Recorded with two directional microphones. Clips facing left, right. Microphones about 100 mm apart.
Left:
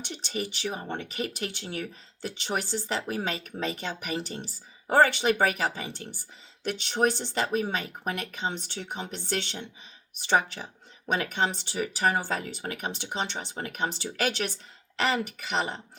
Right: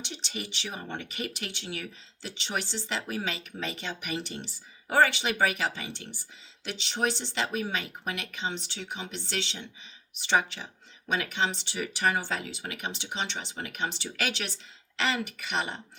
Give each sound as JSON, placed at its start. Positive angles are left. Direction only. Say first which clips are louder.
{"t": 0.0, "sound": "speech", "louder": "left 5 dB", "side_deg": 45}